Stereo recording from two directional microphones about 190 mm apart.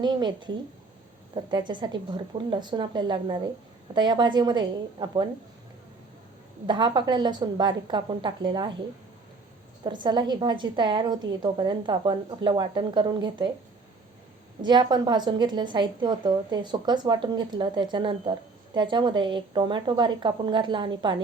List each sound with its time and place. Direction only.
0.0 s a woman's voice: 25° right (ahead or behind)
6.7 s a woman's voice: 25° right (ahead or behind)
9.8 s a woman's voice: 25° right (ahead or behind)
14.6 s a woman's voice: 25° right (ahead or behind)